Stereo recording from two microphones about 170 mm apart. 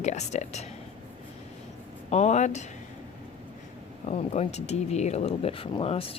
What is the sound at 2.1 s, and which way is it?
Speech, 40° left (ahead or behind).